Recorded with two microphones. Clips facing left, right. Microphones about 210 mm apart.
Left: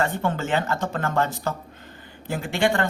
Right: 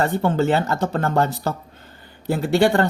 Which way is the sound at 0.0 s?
35° right (ahead or behind).